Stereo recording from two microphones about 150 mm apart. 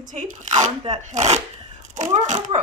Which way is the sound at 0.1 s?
55° right (ahead or behind).